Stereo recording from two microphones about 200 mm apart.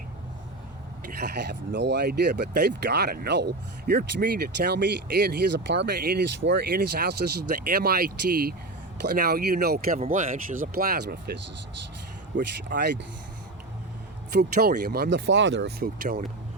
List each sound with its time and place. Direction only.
1.2 s speech: 55° right (ahead or behind)
6.4 s speech: 65° right (ahead or behind)
6.7 s speech: 50° right (ahead or behind)
12.3 s speech: 65° right (ahead or behind)
14.3 s speech: 55° right (ahead or behind)